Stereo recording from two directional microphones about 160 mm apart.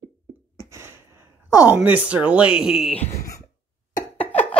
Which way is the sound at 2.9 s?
20° left (ahead or behind).